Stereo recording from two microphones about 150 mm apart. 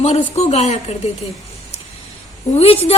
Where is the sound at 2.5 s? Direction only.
40° left (ahead or behind).